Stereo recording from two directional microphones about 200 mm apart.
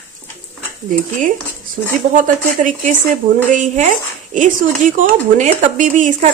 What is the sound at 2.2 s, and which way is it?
Speech, 40° right (ahead or behind).